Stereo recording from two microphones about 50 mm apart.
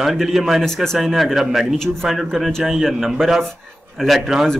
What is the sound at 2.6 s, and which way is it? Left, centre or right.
Speech, centre.